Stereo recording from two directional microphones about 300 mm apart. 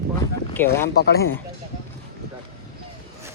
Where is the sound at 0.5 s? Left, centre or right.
Centre.